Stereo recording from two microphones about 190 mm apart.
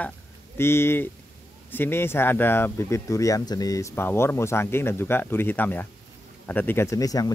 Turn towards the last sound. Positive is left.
turn(degrees=20)  # may be behind; listen again after turning